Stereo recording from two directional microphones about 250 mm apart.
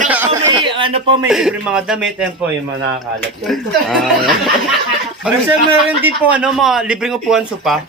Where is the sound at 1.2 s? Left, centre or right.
Centre.